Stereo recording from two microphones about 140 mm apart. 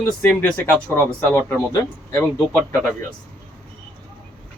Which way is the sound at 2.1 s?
20° left (ahead or behind).